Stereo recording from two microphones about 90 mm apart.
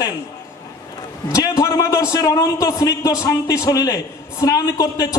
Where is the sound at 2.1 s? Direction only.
45° left (ahead or behind).